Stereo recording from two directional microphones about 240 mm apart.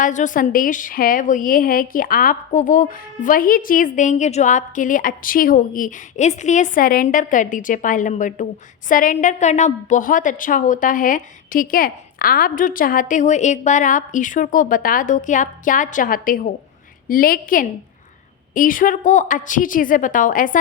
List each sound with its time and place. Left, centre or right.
0.0 s a woman's voice: left